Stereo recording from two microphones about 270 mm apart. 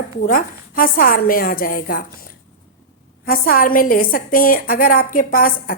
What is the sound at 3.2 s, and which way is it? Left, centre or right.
A woman's voice, left.